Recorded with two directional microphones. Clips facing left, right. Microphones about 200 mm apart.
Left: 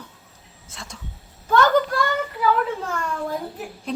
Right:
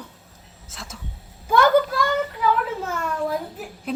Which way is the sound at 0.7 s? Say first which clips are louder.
Right 1 dB; centre (ahead or behind).